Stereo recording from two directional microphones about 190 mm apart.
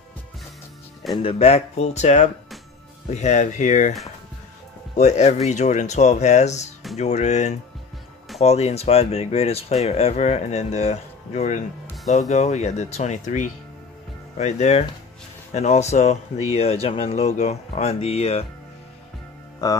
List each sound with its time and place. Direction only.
1.1 s speech: 30° left (ahead or behind)
4.9 s speech: 40° left (ahead or behind)
19.6 s speech: 20° left (ahead or behind)